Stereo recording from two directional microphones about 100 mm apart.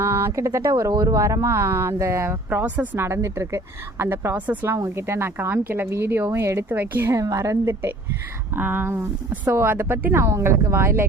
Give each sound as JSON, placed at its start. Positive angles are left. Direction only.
{"t": 0.0, "sound": "speech", "side_deg": -25}
{"t": 2.5, "sound": "speech", "side_deg": -15}